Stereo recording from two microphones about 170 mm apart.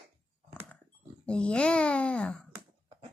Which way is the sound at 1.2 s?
5° left (ahead or behind).